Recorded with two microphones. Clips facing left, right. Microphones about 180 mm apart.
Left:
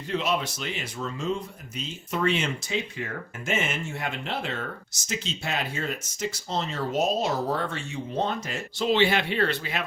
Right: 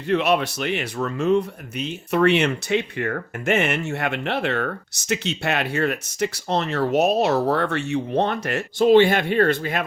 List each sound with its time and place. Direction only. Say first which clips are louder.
0.1 s speech: right 7 dB; 65° right (ahead or behind); by 9.8 s 50° right (ahead or behind)